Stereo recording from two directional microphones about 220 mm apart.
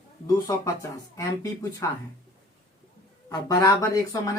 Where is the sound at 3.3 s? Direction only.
15° left (ahead or behind).